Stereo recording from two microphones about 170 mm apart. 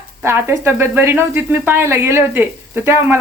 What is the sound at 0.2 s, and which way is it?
Speech, 15° right (ahead or behind).